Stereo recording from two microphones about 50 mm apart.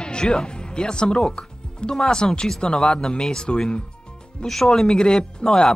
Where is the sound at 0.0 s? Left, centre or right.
Centre.